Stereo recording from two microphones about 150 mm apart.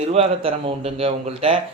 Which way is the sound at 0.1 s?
45° right (ahead or behind).